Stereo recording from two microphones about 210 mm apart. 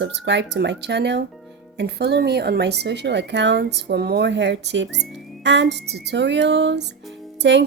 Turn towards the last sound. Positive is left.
turn(degrees=-55)  # may be behind; listen again after turning